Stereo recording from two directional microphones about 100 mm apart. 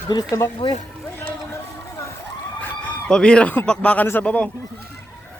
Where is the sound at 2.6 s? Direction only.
10° left (ahead or behind).